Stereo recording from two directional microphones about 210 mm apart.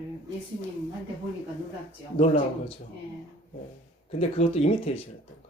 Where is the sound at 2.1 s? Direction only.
30° left (ahead or behind).